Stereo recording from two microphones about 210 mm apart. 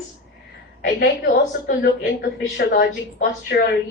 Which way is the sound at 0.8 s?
50° left (ahead or behind).